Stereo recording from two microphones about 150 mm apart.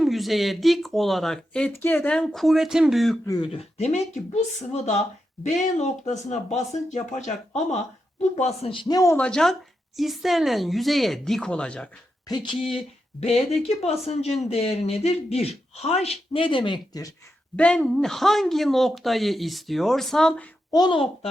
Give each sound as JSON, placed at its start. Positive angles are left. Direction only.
{"t": 0.0, "sound": "speech", "side_deg": 0}
{"t": 3.2, "sound": "speech", "side_deg": 25}
{"t": 3.5, "sound": "speech", "side_deg": 45}
{"t": 9.1, "sound": "speech", "side_deg": 5}
{"t": 12.3, "sound": "speech", "side_deg": 30}
{"t": 17.6, "sound": "speech", "side_deg": 5}
{"t": 20.7, "sound": "speech", "side_deg": 30}